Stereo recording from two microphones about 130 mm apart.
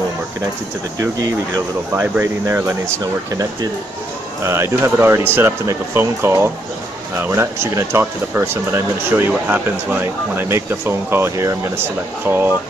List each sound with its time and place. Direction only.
2.0 s speech: 15° right (ahead or behind)
4.5 s speech: 20° right (ahead or behind)